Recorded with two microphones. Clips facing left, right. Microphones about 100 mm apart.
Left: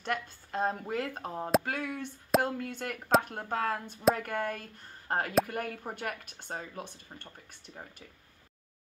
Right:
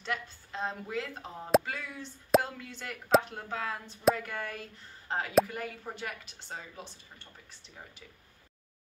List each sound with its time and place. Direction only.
0.0 s speech: 50° left (ahead or behind)